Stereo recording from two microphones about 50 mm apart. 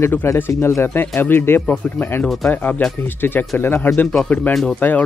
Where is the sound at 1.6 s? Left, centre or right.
Left.